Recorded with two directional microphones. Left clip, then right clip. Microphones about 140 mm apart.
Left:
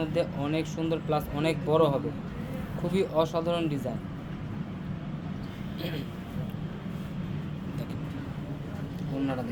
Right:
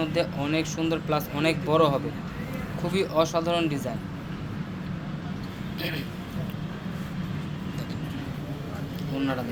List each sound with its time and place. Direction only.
0.0 s speech: 25° left (ahead or behind)